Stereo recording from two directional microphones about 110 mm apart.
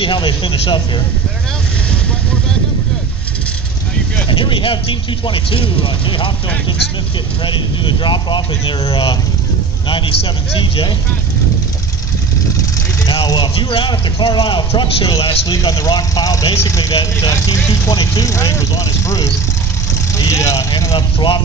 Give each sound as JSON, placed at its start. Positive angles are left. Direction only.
{"t": 0.0, "sound": "speech", "side_deg": 50}
{"t": 4.3, "sound": "speech", "side_deg": 50}
{"t": 7.4, "sound": "speech", "side_deg": 45}
{"t": 13.3, "sound": "speech", "side_deg": 45}
{"t": 15.5, "sound": "speech", "side_deg": 30}
{"t": 21.2, "sound": "speech", "side_deg": 45}